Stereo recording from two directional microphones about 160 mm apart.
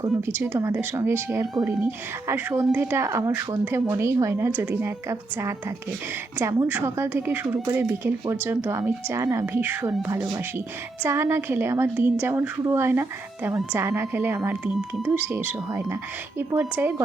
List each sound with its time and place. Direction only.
0.3 s speech: 10° right (ahead or behind)